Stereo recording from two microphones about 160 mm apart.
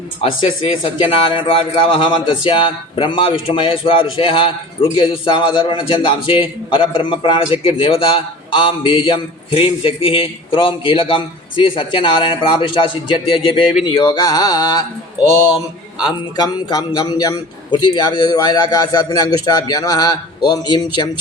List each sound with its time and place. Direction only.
1.1 s a man's voice: 30° left (ahead or behind)